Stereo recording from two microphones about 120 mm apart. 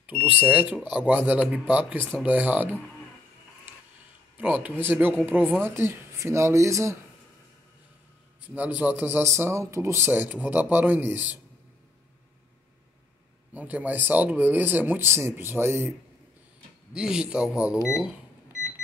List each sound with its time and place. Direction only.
0.5 s speech: 10° right (ahead or behind)
4.4 s speech: 15° right (ahead or behind)
8.5 s speech: 15° right (ahead or behind)
13.5 s speech: 15° right (ahead or behind)
16.9 s speech: 5° right (ahead or behind)